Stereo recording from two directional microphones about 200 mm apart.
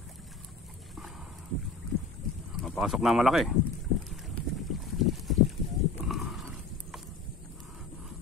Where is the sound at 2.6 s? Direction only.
Centre (ahead or behind).